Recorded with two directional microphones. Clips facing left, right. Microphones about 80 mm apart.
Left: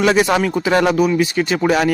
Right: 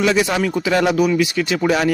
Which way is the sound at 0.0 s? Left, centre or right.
Left.